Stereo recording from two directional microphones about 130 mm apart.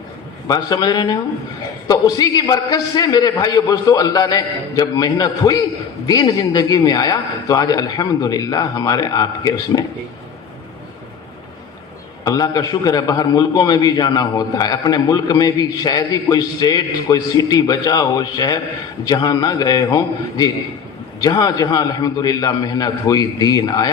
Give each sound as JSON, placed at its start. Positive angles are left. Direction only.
{"t": 0.4, "sound": "a man's voice", "side_deg": 30}
{"t": 12.2, "sound": "a man's voice", "side_deg": 30}